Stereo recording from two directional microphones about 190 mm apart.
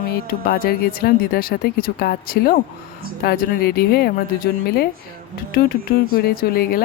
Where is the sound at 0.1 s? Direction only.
50° left (ahead or behind).